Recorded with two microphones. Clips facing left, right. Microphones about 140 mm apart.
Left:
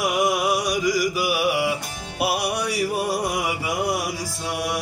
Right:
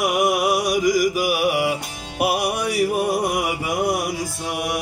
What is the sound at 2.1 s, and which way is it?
Music, 45° right (ahead or behind).